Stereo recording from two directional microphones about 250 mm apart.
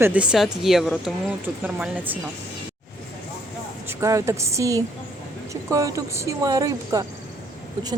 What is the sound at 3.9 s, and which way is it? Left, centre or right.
A woman's voice, centre.